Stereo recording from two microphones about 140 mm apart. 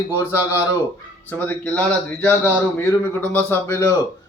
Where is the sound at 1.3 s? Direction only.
10° left (ahead or behind).